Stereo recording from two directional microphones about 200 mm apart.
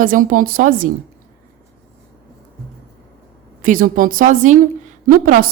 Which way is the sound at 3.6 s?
40° right (ahead or behind).